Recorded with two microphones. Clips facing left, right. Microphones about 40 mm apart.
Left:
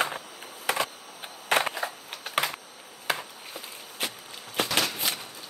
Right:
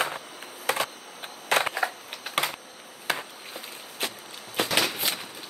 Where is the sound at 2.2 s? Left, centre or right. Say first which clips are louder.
Even; centre.